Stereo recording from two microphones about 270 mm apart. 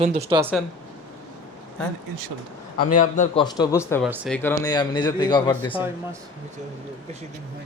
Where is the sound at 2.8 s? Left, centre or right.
Left.